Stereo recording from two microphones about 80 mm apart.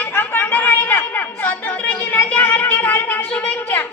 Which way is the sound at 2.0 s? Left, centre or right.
Left.